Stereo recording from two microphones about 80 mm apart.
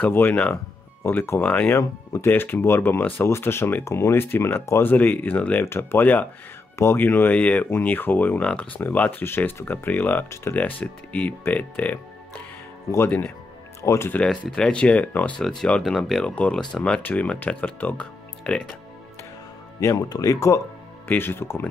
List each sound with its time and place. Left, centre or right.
0.0 s speech: left
2.2 s speech: left
13.7 s speech: left
14.1 s speech: centre
15.4 s speech: centre; by 18.0 s left
18.4 s speech: centre
19.8 s speech: left
21.1 s speech: left